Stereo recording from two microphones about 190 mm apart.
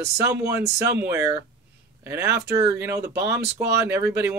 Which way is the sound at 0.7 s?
15° right (ahead or behind).